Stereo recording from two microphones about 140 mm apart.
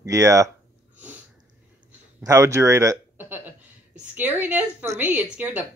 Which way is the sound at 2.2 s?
20° right (ahead or behind).